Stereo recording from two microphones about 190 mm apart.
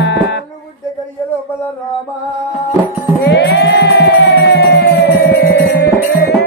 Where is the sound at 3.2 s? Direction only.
65° left (ahead or behind).